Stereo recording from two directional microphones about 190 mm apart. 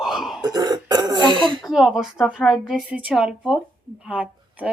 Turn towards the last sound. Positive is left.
turn(degrees=-5)  # may be behind; listen again after turning